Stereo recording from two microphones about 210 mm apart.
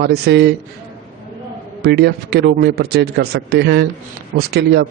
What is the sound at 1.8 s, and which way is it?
A man's voice, 50° right (ahead or behind).